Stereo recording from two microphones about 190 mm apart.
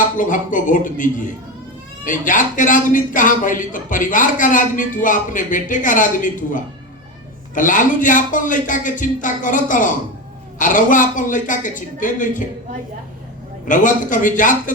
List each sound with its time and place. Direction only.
0.2 s a man's voice: 45° left (ahead or behind)
13.7 s a man's voice: 45° left (ahead or behind)